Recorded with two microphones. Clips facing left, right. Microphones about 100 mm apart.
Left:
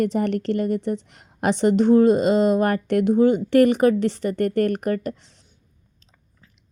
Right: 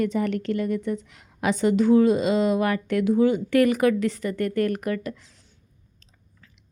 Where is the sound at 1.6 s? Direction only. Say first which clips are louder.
Left 3 dB; 60° left (ahead or behind).